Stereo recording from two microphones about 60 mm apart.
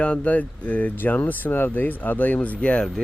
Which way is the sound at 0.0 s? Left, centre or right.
Left.